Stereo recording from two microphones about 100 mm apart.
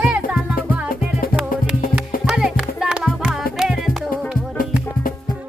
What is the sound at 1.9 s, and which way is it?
Music, 10° right (ahead or behind).